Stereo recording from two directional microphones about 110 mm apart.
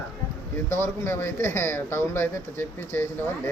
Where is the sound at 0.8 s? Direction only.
20° left (ahead or behind).